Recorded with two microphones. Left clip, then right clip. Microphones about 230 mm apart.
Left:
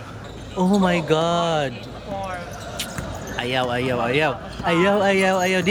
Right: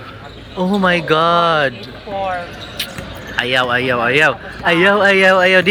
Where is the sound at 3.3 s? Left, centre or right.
Centre.